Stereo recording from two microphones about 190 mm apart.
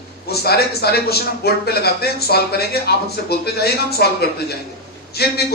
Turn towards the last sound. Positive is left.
turn(degrees=55)  # may be behind; listen again after turning